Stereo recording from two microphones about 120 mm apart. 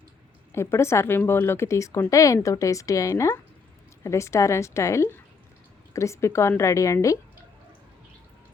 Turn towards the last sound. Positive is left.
turn(degrees=25)  # may be behind; listen again after turning